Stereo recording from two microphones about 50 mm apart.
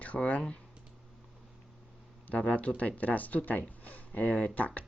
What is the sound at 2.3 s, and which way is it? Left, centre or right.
Speech, left.